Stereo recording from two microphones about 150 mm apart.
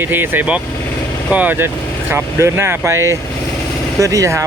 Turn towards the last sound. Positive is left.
turn(degrees=-20)  # may be behind; listen again after turning